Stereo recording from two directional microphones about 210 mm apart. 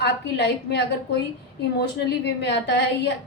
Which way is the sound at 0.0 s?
55° left (ahead or behind).